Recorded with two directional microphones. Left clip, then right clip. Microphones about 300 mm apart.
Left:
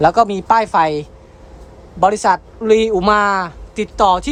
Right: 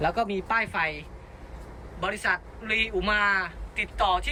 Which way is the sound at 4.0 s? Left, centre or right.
Centre.